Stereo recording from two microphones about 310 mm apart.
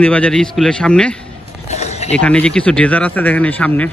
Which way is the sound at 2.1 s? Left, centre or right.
Centre.